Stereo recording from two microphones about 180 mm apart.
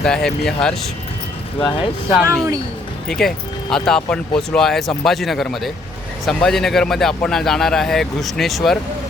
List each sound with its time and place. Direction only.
0.0 s speech: 5° left (ahead or behind)
1.5 s speech: 30° left (ahead or behind)
3.1 s speech: 5° left (ahead or behind)